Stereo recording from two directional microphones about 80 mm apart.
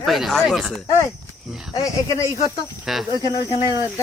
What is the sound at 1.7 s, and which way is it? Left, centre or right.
Speech, left.